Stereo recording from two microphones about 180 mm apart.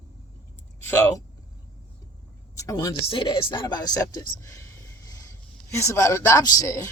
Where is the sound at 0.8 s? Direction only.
10° left (ahead or behind).